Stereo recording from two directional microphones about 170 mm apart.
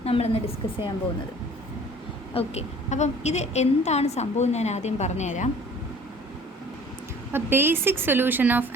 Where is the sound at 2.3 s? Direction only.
35° left (ahead or behind).